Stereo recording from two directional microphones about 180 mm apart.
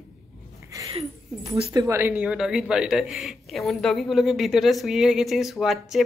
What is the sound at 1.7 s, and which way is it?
Speech, 15° right (ahead or behind).